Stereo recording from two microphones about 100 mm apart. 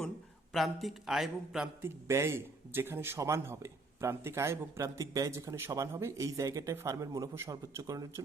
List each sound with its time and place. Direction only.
0.5 s a man's voice: centre (ahead or behind)
1.8 s a man's voice: 25° right (ahead or behind)